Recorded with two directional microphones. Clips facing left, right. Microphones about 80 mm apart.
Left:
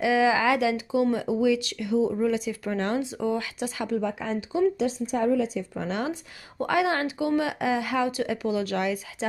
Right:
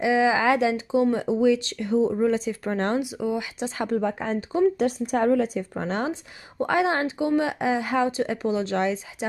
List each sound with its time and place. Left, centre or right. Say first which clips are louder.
0.0 s a woman's voice: right 1 dB; right
3.0 s speech: right 1 dB; centre
3.7 s speech: right 4 dB; right
4.8 s a woman's voice: right 3 dB; right